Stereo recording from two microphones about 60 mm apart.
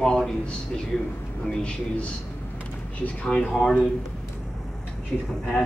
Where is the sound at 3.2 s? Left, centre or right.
Centre.